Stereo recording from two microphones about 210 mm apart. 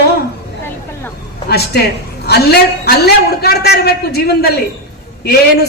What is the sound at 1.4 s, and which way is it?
A woman's voice, 50° left (ahead or behind).